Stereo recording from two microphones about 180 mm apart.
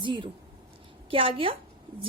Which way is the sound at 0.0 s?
25° right (ahead or behind).